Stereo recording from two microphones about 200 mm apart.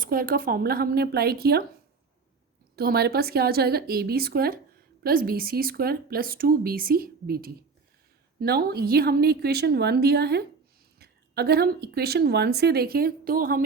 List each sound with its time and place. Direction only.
0.0 s a woman's voice: 45° right (ahead or behind)
2.7 s a woman's voice: 50° right (ahead or behind)